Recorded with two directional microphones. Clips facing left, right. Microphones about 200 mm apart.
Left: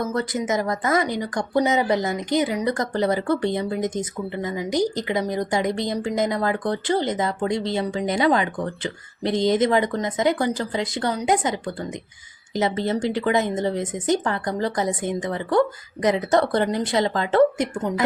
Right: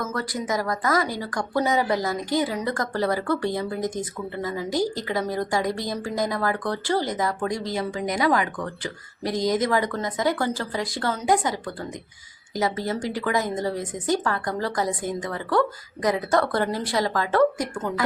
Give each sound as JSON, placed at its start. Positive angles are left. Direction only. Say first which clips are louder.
{"t": 0.0, "sound": "a woman's voice", "louder": "left 4 dB", "side_deg": 20}